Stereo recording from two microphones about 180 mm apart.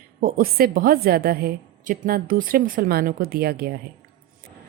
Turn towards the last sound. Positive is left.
turn(degrees=-60)  # may be behind; listen again after turning